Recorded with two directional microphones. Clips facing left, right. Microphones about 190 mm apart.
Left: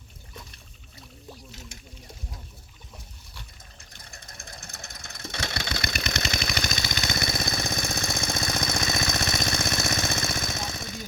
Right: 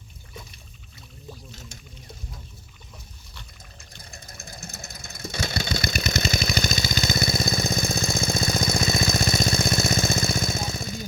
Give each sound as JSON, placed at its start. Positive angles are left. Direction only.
{"t": 4.1, "sound": "engine", "side_deg": -25}